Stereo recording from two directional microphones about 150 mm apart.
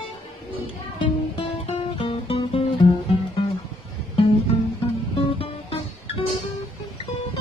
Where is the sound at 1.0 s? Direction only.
35° left (ahead or behind).